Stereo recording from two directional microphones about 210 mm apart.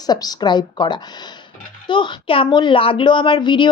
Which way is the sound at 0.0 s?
20° left (ahead or behind).